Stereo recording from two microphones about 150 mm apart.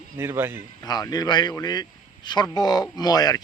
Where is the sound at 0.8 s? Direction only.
25° left (ahead or behind).